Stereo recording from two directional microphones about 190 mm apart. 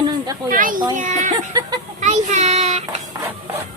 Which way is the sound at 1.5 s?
20° right (ahead or behind).